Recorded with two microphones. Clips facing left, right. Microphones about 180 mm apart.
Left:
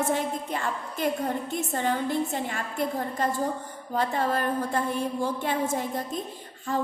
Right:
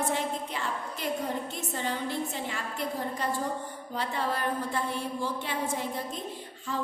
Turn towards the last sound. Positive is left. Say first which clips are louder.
# left 5 dB
turn(degrees=45)  # may be behind; listen again after turning